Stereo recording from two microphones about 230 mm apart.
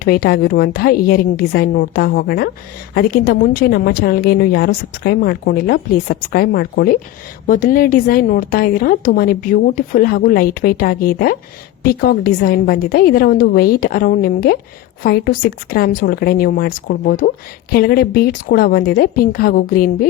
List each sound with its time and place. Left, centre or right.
0.0 s a woman's voice: left